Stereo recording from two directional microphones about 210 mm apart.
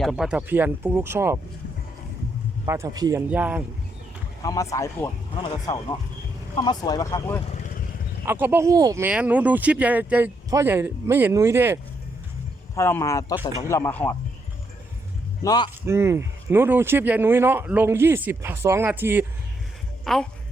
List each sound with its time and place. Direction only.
0.0 s speech: centre (ahead or behind)
2.6 s speech: 15° right (ahead or behind)
4.4 s speech: 15° left (ahead or behind)
7.4 s vehicle: 35° left (ahead or behind)
8.2 s speech: 10° right (ahead or behind)
12.7 s speech: 15° left (ahead or behind)
15.4 s speech: 20° left (ahead or behind)
15.9 s speech: 10° right (ahead or behind)
20.1 s speech: centre (ahead or behind)